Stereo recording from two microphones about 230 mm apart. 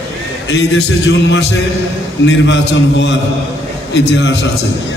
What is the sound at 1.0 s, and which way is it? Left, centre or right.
A man's voice, left.